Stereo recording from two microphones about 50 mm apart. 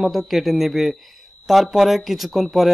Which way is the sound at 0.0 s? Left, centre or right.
Centre.